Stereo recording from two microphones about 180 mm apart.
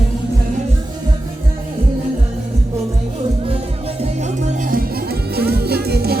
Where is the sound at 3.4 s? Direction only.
35° right (ahead or behind).